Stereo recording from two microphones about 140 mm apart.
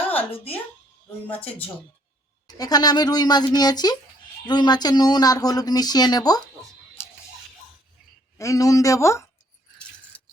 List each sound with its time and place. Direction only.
1.3 s speech: 10° left (ahead or behind)
2.6 s speech: 30° left (ahead or behind)
8.4 s speech: 20° left (ahead or behind)